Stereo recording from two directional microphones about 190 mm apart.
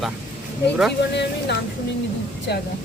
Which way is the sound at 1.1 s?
65° left (ahead or behind).